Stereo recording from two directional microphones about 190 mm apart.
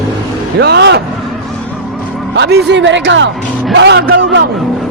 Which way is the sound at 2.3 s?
60° right (ahead or behind).